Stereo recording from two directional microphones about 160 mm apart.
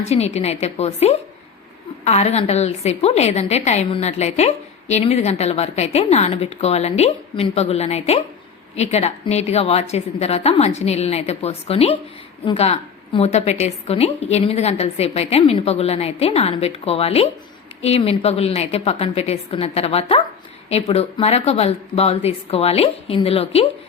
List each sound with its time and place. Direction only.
0.0 s a woman's voice: 40° left (ahead or behind)